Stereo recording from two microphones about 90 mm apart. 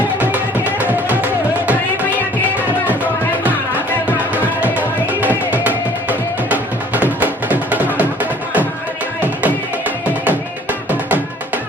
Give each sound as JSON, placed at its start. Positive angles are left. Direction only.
{"t": 0.2, "sound": "music", "side_deg": -20}
{"t": 4.6, "sound": "music", "side_deg": -15}
{"t": 10.2, "sound": "music", "side_deg": -20}